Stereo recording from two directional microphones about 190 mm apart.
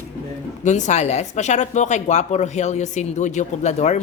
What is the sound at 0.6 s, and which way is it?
Speech, 40° left (ahead or behind).